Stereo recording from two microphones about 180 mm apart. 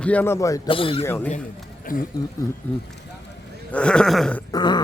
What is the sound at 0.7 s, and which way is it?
Speech, 30° left (ahead or behind).